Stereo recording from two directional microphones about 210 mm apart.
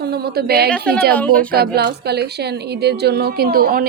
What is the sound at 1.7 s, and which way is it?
A woman's voice, 50° right (ahead or behind).